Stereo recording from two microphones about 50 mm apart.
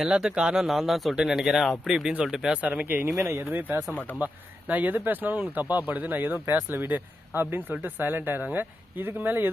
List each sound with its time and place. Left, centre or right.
0.1 s speech: centre
0.7 s speech: centre
2.5 s speech: right
2.8 s speech: right
3.2 s speech: right
3.5 s speech: right